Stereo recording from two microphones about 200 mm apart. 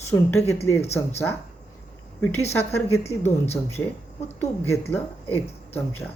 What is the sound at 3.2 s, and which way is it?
Speech, 30° left (ahead or behind).